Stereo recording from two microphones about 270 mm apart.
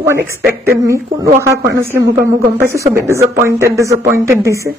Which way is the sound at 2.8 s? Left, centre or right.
Centre.